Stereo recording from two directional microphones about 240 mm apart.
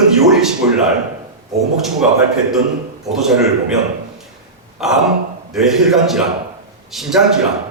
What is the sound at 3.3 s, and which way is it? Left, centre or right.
Speech, centre.